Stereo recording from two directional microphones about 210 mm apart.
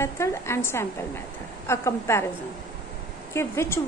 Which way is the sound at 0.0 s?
10° left (ahead or behind).